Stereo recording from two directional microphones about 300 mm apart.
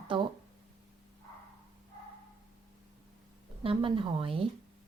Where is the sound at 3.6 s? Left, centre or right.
Centre.